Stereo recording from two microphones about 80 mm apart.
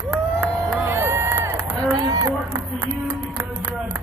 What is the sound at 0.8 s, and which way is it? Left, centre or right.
Run, right.